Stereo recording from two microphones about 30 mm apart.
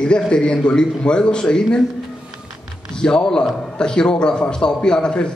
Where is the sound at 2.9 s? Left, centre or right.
Left.